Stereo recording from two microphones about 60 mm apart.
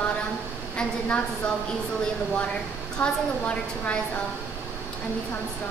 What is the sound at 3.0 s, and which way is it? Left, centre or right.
A woman's voice, left.